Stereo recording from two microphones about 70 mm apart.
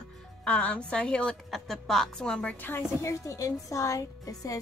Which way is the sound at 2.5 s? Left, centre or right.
Left.